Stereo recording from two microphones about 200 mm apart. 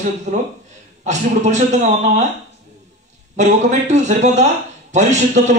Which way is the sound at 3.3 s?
35° right (ahead or behind).